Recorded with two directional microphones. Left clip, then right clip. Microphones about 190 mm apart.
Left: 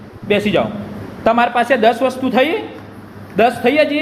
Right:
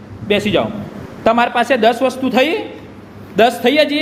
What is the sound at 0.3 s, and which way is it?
A man's voice, 20° right (ahead or behind).